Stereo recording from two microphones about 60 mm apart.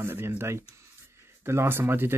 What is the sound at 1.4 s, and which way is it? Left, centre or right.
Speech, right.